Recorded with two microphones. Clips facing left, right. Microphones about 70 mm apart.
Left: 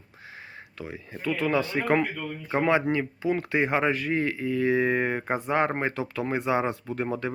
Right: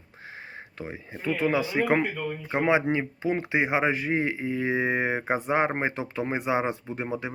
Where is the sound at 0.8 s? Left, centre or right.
Right.